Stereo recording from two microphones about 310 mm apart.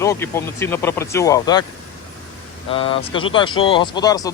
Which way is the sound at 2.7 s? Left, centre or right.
Centre.